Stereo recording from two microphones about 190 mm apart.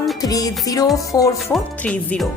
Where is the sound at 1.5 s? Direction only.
Centre (ahead or behind).